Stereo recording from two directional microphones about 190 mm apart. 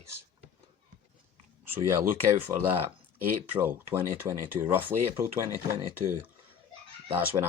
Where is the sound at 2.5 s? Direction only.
15° right (ahead or behind).